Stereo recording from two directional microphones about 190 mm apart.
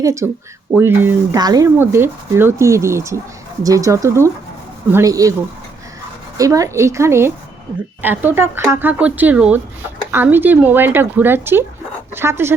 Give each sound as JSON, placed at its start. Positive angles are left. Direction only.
{"t": 0.0, "sound": "speech", "side_deg": -15}
{"t": 6.3, "sound": "speech", "side_deg": -15}